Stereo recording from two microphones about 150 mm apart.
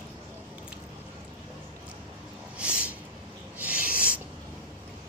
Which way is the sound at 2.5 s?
5° right (ahead or behind).